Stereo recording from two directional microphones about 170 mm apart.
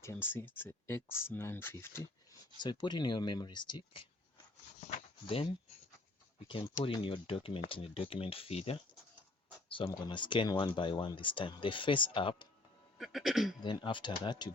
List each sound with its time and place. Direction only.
0.0 s speech: 15° left (ahead or behind)
2.6 s speech: 25° left (ahead or behind)
4.8 s speech: 35° left (ahead or behind)
13.0 s speech: centre (ahead or behind)
13.6 s speech: 30° left (ahead or behind)